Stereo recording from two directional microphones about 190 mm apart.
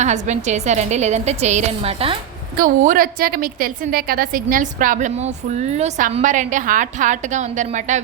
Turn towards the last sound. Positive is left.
turn(degrees=-40)  # may be behind; listen again after turning